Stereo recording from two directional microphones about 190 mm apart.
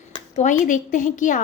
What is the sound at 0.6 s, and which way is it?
Speech, 40° left (ahead or behind).